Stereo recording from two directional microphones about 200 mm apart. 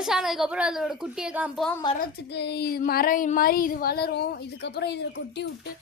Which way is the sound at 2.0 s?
60° left (ahead or behind).